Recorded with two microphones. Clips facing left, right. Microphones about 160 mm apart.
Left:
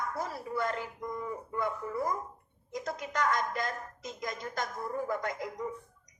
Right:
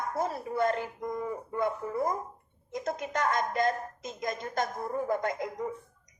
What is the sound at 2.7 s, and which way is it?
A woman's voice, 20° right (ahead or behind).